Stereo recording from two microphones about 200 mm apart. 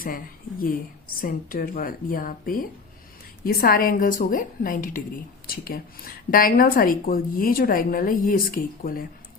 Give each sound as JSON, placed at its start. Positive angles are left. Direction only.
{"t": 0.6, "sound": "a woman's voice", "side_deg": 45}